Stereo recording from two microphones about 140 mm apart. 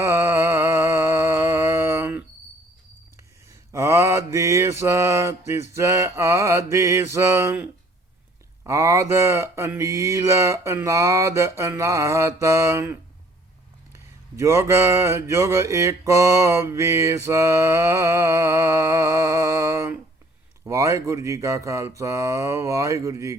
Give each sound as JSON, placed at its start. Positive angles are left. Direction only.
{"t": 0.0, "sound": "music", "side_deg": -20}
{"t": 3.7, "sound": "mantra", "side_deg": -20}
{"t": 14.3, "sound": "mantra", "side_deg": -20}